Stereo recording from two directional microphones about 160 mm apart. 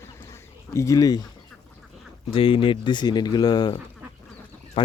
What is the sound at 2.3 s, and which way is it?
Speech, 35° left (ahead or behind).